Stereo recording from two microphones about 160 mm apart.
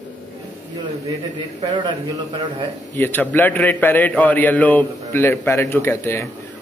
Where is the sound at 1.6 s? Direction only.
25° right (ahead or behind).